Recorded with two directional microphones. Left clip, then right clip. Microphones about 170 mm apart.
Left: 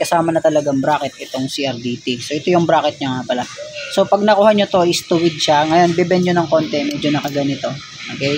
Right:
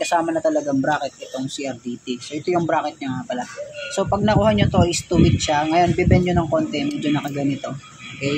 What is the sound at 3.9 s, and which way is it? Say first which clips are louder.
Speech: left 7 dB; 40° left (ahead or behind).